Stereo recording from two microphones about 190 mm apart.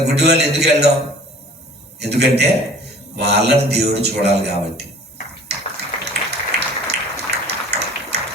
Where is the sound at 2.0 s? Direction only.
60° right (ahead or behind).